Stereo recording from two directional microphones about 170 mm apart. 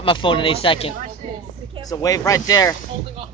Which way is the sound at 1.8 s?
20° left (ahead or behind).